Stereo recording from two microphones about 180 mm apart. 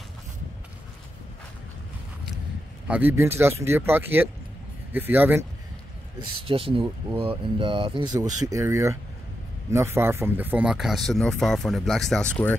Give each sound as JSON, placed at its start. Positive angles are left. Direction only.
{"t": 2.9, "sound": "speech", "side_deg": -10}
{"t": 6.1, "sound": "speech", "side_deg": -30}